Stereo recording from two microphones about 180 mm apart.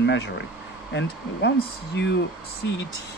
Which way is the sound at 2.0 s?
75° left (ahead or behind).